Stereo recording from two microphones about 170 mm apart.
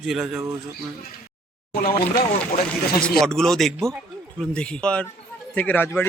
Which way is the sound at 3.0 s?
5° left (ahead or behind).